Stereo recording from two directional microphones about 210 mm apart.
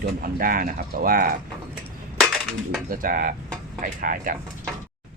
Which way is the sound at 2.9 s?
40° right (ahead or behind).